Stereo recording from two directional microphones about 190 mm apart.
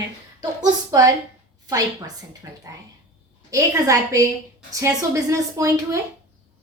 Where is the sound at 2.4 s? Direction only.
20° right (ahead or behind).